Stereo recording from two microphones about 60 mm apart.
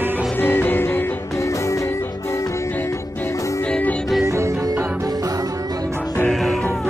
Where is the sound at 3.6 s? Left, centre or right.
Centre.